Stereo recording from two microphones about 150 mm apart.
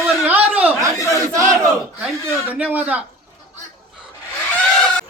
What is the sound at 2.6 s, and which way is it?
Speech, 10° right (ahead or behind).